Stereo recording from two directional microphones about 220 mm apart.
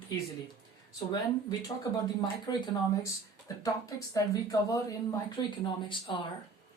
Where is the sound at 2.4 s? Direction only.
20° left (ahead or behind).